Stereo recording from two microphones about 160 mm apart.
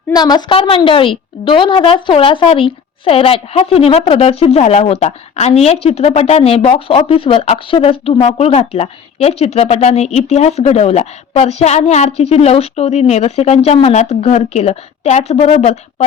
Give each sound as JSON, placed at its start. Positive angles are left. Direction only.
{"t": 0.1, "sound": "speech", "side_deg": 25}